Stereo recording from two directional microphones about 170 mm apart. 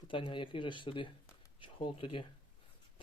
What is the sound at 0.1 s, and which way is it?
Speech, 30° left (ahead or behind).